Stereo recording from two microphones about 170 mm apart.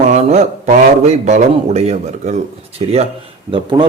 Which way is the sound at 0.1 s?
40° right (ahead or behind).